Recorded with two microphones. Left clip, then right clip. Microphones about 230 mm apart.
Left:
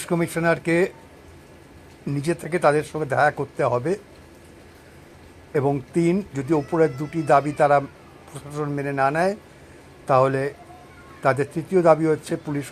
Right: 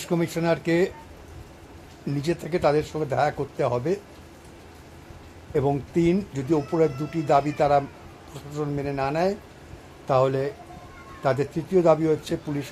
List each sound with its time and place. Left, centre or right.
0.0 s speech: centre
2.2 s speech: centre
5.5 s speech: centre